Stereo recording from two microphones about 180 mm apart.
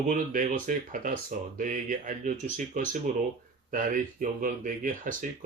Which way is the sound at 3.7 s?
45° right (ahead or behind).